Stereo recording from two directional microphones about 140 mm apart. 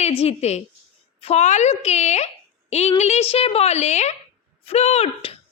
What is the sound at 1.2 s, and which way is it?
A woman's voice, 50° left (ahead or behind).